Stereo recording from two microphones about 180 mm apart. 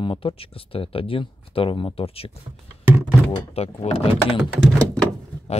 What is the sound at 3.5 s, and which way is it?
Speech, 35° left (ahead or behind).